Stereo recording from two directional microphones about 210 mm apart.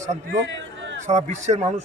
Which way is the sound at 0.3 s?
60° right (ahead or behind).